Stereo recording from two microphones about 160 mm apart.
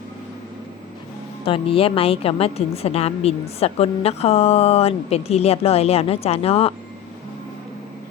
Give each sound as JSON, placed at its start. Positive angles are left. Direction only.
{"t": 1.5, "sound": "a woman's voice", "side_deg": 35}